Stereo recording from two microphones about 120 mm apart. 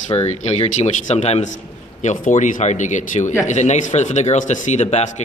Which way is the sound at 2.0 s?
90° left.